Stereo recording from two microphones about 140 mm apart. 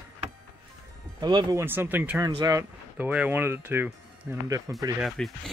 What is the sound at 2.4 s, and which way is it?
Speech, 25° right (ahead or behind).